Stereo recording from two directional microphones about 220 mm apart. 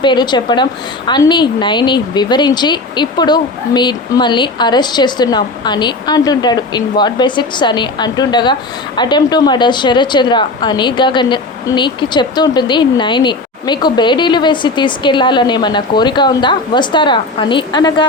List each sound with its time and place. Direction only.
0.0 s speech: 20° left (ahead or behind)